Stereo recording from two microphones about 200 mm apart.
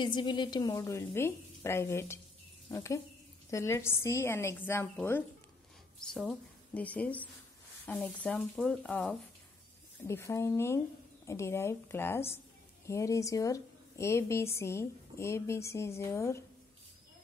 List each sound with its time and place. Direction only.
0.0 s a woman's voice: 25° left (ahead or behind)